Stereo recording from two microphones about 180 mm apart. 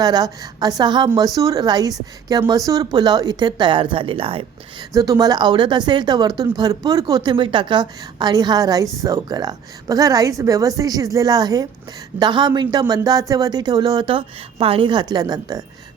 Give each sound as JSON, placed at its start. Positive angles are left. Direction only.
{"t": 0.0, "sound": "speech", "side_deg": -20}
{"t": 4.9, "sound": "speech", "side_deg": -20}